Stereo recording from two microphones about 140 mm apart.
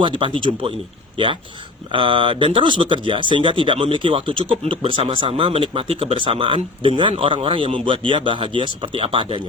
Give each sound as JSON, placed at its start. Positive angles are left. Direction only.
{"t": 0.0, "sound": "a man's voice", "side_deg": -35}